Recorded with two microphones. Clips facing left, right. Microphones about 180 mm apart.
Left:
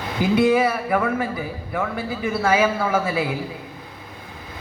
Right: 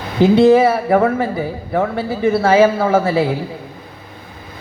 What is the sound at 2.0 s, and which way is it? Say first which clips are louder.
Speech: right 8 dB; 30° right (ahead or behind).